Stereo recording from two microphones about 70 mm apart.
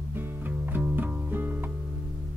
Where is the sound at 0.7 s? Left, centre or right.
Right.